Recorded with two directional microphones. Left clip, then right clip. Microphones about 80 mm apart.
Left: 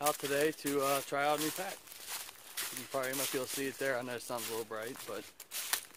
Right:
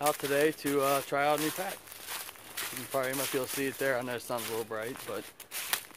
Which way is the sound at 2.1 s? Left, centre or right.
Left.